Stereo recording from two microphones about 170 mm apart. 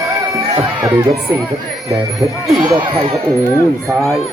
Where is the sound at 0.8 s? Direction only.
20° right (ahead or behind).